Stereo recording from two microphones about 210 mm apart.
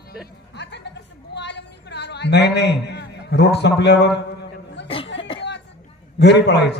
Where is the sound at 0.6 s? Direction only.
55° left (ahead or behind).